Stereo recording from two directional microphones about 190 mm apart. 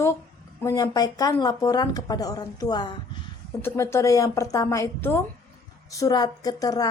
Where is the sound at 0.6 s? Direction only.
20° left (ahead or behind).